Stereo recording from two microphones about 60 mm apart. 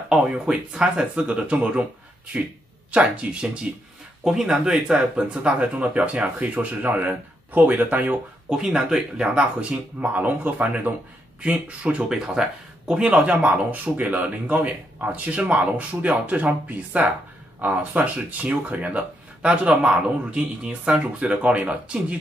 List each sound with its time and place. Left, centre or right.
0.1 s speech: centre
2.9 s speech: centre
8.5 s speech: centre